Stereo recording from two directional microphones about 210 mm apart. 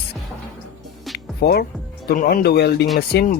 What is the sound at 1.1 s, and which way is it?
Music, centre (ahead or behind).